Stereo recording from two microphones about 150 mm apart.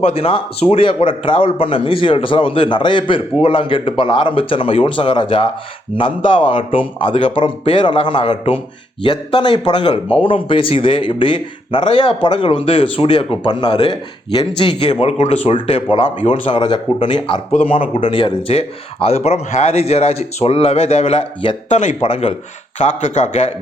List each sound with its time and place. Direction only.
0.0 s a man's voice: 40° left (ahead or behind)